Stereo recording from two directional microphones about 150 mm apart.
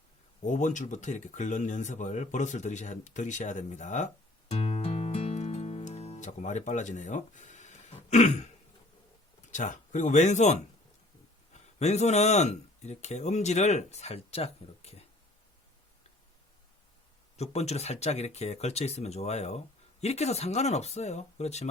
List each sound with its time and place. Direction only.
0.4 s speech: 55° left (ahead or behind)
9.5 s speech: 55° left (ahead or behind)
17.3 s speech: 45° left (ahead or behind)